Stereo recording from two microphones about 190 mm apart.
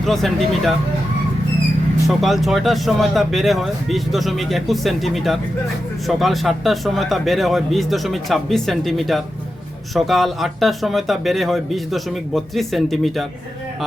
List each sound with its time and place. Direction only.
0.0 s speech: centre (ahead or behind)
2.0 s speech: centre (ahead or behind)